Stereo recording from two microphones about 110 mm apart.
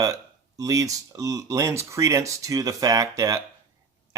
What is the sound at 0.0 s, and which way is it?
Speech, 30° right (ahead or behind).